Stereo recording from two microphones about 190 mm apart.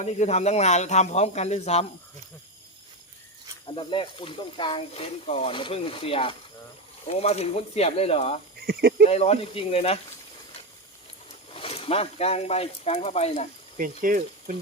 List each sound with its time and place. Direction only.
0.0 s speech: 35° left (ahead or behind)
3.8 s speech: 25° left (ahead or behind)
8.6 s insect: 55° right (ahead or behind)
9.0 s speech: 35° left (ahead or behind)
11.5 s speech: 30° left (ahead or behind)
13.7 s speech: 45° right (ahead or behind)